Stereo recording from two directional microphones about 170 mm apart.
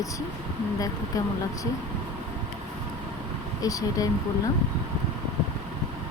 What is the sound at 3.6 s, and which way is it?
Speech, 20° left (ahead or behind).